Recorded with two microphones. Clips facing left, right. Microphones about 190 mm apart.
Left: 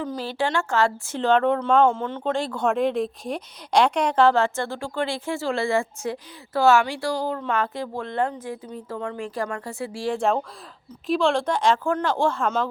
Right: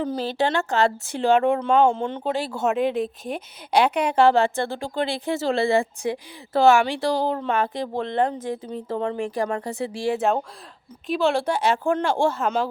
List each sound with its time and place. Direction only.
0.2 s a woman's voice: 20° right (ahead or behind)
7.6 s speech: 15° right (ahead or behind)
9.1 s a woman's voice: 15° right (ahead or behind)
10.2 s a woman's voice: 5° right (ahead or behind)